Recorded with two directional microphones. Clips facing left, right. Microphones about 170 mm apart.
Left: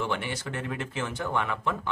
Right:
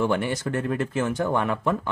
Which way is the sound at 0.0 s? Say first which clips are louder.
Right 7 dB; 45° right (ahead or behind).